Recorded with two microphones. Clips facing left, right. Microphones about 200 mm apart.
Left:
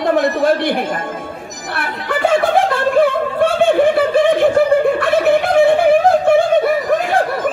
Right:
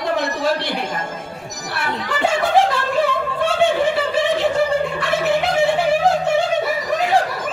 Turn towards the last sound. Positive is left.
turn(degrees=55)  # may be behind; listen again after turning